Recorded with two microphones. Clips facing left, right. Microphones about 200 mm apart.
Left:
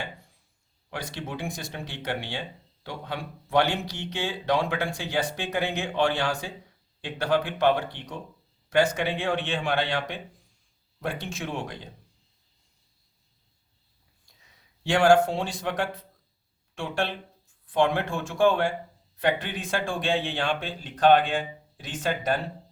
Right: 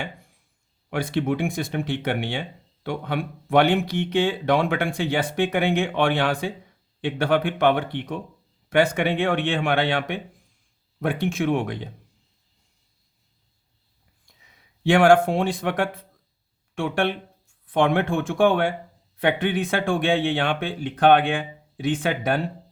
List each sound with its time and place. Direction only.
0.9 s speech: 55° right (ahead or behind)
14.8 s speech: 55° right (ahead or behind)